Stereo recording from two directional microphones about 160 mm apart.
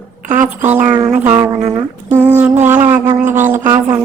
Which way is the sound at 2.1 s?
10° right (ahead or behind).